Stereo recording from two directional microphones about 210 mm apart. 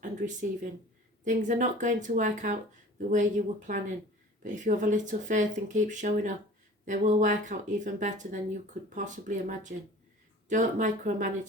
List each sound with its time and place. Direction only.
0.0 s speech: 35° right (ahead or behind)